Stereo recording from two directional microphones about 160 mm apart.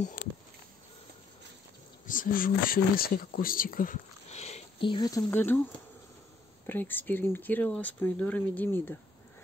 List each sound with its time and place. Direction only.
2.0 s speech: 60° left (ahead or behind); by 5.2 s 25° left (ahead or behind)
5.3 s speech: 15° left (ahead or behind)
6.6 s speech: 10° left (ahead or behind)